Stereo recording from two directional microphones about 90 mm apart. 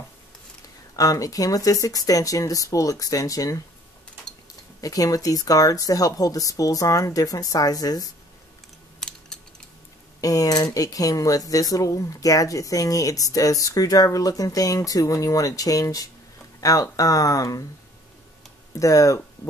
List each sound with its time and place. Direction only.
0.9 s speech: 40° left (ahead or behind)
4.8 s speech: 40° left (ahead or behind)
10.2 s speech: 40° left (ahead or behind)
18.8 s speech: 35° left (ahead or behind)